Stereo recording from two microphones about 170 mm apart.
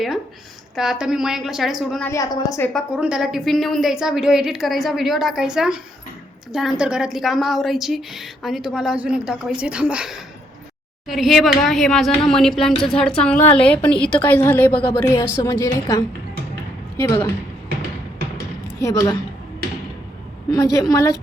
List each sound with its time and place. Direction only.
0.8 s a woman's voice: 5° right (ahead or behind)
2.0 s a woman's voice: 20° left (ahead or behind)
2.7 s a woman's voice: 5° right (ahead or behind); by 17.2 s 15° left (ahead or behind)
18.8 s a woman's voice: 20° left (ahead or behind)
20.5 s a woman's voice: 20° left (ahead or behind)